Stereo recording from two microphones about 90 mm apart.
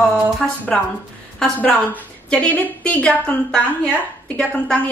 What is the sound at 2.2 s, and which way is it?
Speech, 15° left (ahead or behind).